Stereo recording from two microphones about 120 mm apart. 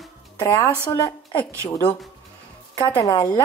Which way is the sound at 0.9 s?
25° left (ahead or behind).